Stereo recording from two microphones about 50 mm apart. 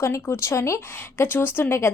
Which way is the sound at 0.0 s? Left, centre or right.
Left.